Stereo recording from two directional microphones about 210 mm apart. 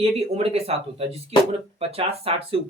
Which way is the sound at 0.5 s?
30° right (ahead or behind).